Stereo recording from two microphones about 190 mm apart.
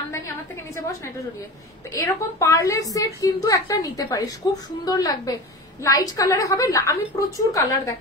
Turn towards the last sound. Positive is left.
turn(degrees=15)  # may be behind; listen again after turning